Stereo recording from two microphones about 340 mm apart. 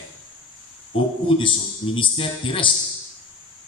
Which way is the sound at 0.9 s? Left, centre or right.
Centre.